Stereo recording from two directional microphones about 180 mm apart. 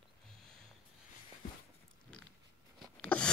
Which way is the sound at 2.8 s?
5° left (ahead or behind).